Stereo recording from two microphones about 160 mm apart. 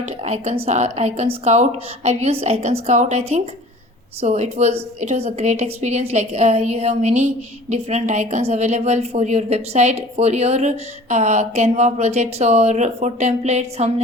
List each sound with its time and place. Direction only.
0.0 s a woman's voice: 40° right (ahead or behind)